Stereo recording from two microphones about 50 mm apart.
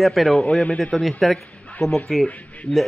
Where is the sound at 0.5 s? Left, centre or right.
Left.